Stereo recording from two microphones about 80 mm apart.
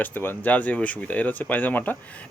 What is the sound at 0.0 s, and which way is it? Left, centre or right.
Speech, left.